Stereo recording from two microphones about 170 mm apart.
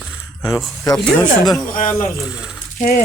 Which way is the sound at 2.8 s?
50° left (ahead or behind).